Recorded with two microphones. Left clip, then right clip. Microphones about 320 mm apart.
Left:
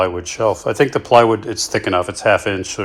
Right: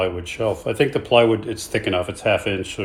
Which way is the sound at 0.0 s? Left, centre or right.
Left.